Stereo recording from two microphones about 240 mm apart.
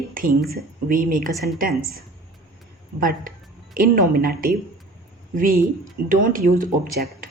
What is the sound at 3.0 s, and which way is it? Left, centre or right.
Speech, right.